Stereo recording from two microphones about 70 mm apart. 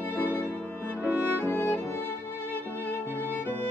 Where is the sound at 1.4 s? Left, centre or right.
Left.